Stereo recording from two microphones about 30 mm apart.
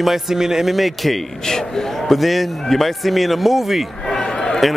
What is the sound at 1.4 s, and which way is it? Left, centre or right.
Speech, left.